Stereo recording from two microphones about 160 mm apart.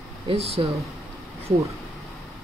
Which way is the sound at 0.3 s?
40° right (ahead or behind).